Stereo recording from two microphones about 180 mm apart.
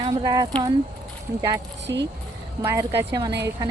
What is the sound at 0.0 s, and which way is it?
Speech, 20° right (ahead or behind).